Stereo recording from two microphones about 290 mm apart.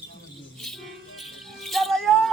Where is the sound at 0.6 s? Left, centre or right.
Centre.